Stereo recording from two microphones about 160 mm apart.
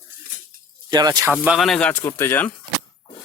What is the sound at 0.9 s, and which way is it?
Speech, 25° right (ahead or behind).